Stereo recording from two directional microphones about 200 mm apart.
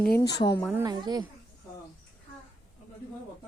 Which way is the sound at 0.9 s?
20° right (ahead or behind).